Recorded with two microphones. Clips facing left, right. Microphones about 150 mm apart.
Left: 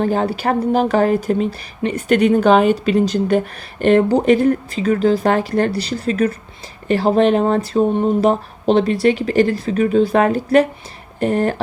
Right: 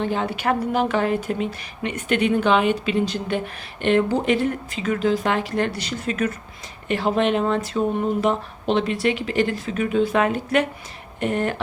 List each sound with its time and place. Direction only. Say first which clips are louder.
0.0 s speech: left 6 dB; 40° left (ahead or behind)